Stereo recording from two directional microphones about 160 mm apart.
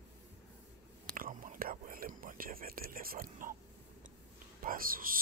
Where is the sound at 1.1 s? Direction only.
55° right (ahead or behind).